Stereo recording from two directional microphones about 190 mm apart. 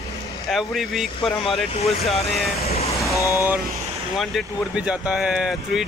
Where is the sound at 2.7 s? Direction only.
35° left (ahead or behind).